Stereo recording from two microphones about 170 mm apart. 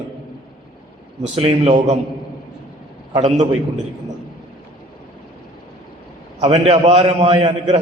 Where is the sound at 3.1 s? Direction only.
40° right (ahead or behind).